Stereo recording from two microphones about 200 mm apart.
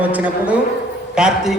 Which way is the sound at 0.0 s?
10° right (ahead or behind).